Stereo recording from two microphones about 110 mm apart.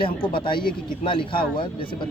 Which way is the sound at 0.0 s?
50° left (ahead or behind).